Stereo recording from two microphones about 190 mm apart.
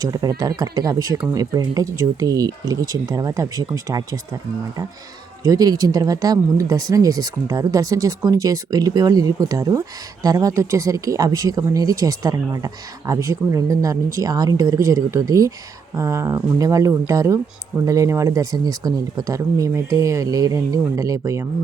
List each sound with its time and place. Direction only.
0.0 s speech: 20° right (ahead or behind)
5.4 s speech: 20° right (ahead or behind)